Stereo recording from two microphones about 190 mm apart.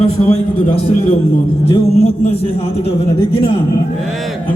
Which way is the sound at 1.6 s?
30° left (ahead or behind).